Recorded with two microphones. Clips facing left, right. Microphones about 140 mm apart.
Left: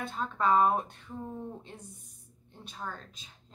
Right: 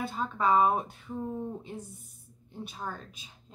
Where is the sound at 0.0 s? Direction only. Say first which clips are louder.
Right 1 dB; 5° right (ahead or behind).